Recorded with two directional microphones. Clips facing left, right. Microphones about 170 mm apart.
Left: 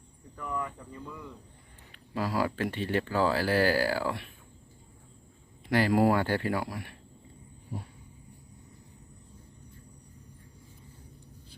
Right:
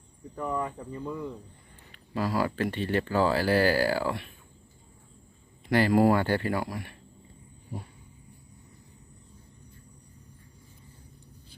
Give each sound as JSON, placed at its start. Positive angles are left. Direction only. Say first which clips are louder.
{"t": 0.3, "sound": "speech", "louder": "right 5 dB", "side_deg": -35}
{"t": 1.9, "sound": "speech", "louder": "right 2 dB", "side_deg": 5}
{"t": 5.7, "sound": "speech", "louder": "right 2 dB", "side_deg": 5}